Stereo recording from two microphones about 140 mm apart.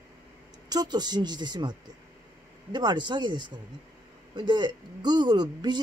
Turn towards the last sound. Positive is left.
turn(degrees=-30)  # may be behind; listen again after turning